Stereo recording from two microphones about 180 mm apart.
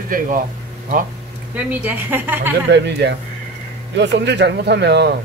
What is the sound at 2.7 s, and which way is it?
Speech, 70° right (ahead or behind).